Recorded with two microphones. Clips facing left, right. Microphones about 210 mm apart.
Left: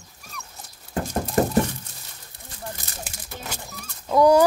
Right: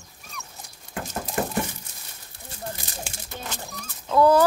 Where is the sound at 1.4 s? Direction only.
40° left (ahead or behind).